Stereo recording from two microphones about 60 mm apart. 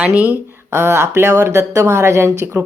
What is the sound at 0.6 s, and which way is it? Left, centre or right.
Speech, right.